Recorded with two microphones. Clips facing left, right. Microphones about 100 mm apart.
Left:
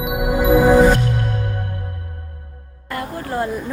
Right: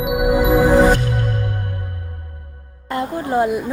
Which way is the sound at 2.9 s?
20° right (ahead or behind).